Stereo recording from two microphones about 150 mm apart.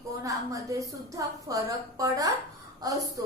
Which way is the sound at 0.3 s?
20° right (ahead or behind).